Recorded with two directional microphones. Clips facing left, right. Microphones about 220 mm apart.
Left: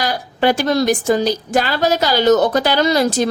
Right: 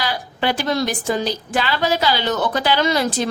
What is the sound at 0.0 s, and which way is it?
A woman's voice, 45° left (ahead or behind).